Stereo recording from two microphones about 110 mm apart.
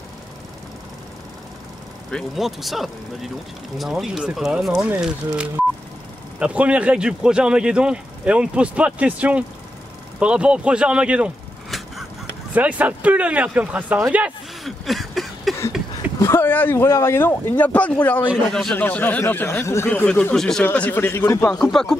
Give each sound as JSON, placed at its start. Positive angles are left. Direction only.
{"t": 2.0, "sound": "speech", "side_deg": 0}
{"t": 12.5, "sound": "speech", "side_deg": -15}
{"t": 14.6, "sound": "a sound", "side_deg": 0}
{"t": 16.2, "sound": "speech", "side_deg": 25}
{"t": 18.5, "sound": "speech", "side_deg": 5}
{"t": 18.8, "sound": "speech", "side_deg": 15}
{"t": 20.6, "sound": "speech", "side_deg": 15}
{"t": 21.5, "sound": "speech", "side_deg": 5}